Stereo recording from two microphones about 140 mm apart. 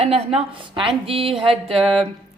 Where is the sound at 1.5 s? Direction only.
45° right (ahead or behind).